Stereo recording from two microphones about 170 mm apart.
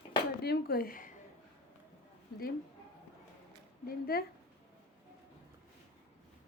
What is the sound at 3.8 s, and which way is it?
Speech, 60° left (ahead or behind).